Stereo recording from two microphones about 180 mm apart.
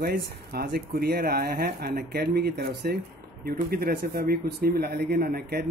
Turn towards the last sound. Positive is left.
turn(degrees=-60)  # may be behind; listen again after turning